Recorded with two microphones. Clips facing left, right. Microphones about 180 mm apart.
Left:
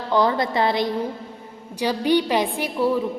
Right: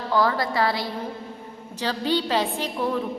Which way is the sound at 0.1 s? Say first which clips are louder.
Left 3 dB; 20° left (ahead or behind).